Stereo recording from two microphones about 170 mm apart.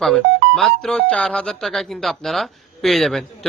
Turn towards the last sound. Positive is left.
turn(degrees=0)  # may be behind; listen again after turning